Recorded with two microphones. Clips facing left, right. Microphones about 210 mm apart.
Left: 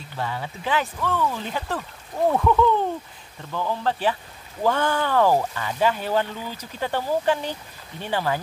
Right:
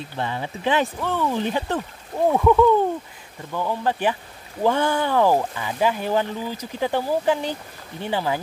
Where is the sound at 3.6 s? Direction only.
15° right (ahead or behind).